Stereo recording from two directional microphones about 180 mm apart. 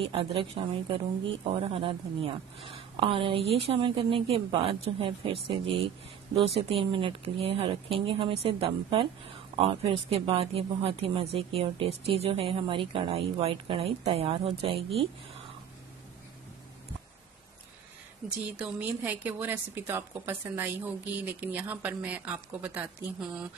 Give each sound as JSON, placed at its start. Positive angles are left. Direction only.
{"t": 0.0, "sound": "speech", "side_deg": -30}
{"t": 18.6, "sound": "a woman's voice", "side_deg": -10}